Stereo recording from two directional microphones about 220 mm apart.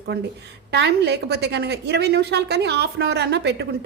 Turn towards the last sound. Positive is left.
turn(degrees=-50)  # may be behind; listen again after turning